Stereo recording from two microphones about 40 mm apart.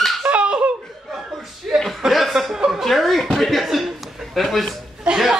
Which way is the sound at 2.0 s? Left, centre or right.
Centre.